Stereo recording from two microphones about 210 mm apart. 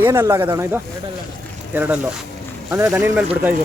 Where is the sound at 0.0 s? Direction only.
15° right (ahead or behind).